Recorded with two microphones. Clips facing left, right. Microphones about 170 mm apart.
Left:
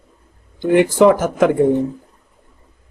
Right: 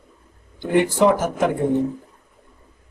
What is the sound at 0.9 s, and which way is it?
Speech, 90° left.